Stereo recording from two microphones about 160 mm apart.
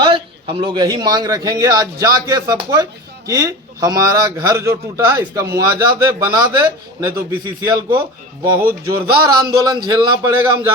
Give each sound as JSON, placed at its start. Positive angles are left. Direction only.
{"t": 0.0, "sound": "a man's voice", "side_deg": -30}
{"t": 9.2, "sound": "a man's voice", "side_deg": -25}